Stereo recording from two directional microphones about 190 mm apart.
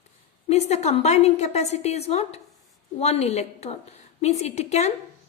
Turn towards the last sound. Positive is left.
turn(degrees=35)  # may be behind; listen again after turning